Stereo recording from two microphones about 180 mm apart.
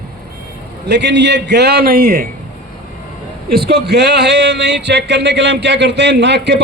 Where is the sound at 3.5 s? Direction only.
65° right (ahead or behind).